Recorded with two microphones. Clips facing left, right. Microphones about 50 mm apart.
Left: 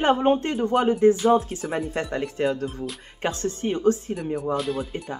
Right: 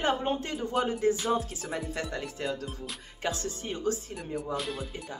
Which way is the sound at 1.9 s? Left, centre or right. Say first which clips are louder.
Left 7 dB; left.